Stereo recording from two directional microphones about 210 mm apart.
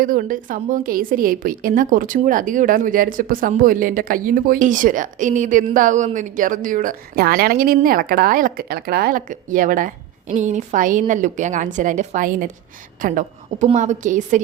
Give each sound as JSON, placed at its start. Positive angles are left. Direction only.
{"t": 0.0, "sound": "a woman's voice", "side_deg": -40}